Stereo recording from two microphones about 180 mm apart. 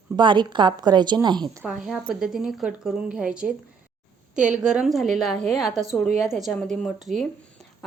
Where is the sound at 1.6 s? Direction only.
5° right (ahead or behind).